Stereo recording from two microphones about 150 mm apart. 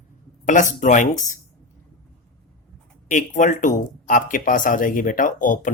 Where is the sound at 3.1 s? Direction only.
55° left (ahead or behind).